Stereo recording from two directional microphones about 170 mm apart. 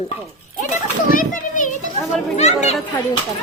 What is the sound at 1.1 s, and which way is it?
Children playing, 50° left (ahead or behind).